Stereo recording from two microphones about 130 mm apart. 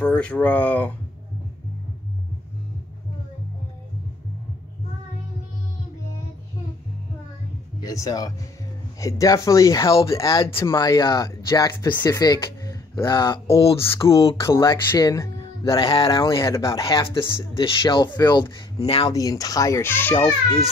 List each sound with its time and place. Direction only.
0.0 s speech: 10° left (ahead or behind)
7.8 s a child's voice: 25° left (ahead or behind)
10.3 s a child's voice: 40° left (ahead or behind)
13.8 s a child's voice: 20° left (ahead or behind)
15.9 s speech: 40° left (ahead or behind)
16.2 s a child's voice: 25° left (ahead or behind)
17.4 s speech: 40° left (ahead or behind)
18.8 s speech: 45° left (ahead or behind)
19.1 s a child's voice: 30° left (ahead or behind)